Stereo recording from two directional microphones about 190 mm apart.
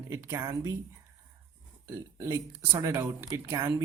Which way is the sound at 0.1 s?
15° right (ahead or behind).